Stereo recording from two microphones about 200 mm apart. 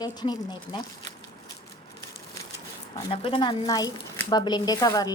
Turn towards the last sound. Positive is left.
turn(degrees=20)  # may be behind; listen again after turning